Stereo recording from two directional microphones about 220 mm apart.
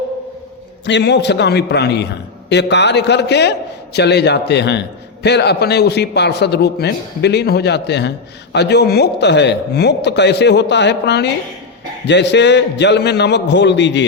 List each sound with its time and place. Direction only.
0.9 s a man's voice: 55° left (ahead or behind)